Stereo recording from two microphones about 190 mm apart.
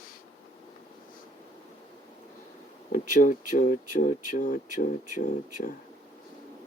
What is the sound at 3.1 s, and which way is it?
Speech, 45° left (ahead or behind).